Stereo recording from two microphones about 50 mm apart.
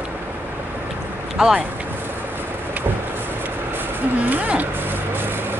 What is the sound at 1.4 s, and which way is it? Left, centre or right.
Speech, centre.